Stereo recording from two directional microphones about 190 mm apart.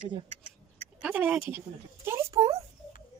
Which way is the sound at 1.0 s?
5° right (ahead or behind).